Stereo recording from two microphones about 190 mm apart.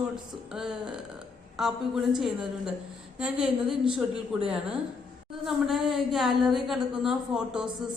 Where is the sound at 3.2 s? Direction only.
5° right (ahead or behind).